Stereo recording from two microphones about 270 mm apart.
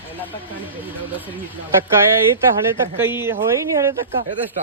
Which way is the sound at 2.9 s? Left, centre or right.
Centre.